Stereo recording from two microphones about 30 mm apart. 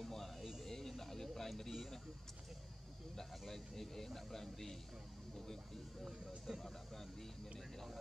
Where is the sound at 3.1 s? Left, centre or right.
Centre.